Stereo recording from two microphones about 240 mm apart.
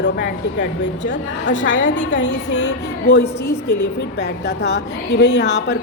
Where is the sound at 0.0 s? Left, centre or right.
Left.